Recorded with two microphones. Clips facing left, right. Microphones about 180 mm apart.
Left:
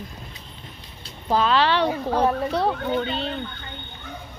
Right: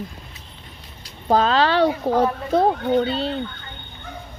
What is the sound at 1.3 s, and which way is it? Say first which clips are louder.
Speech: right 2 dB; 40° right (ahead or behind).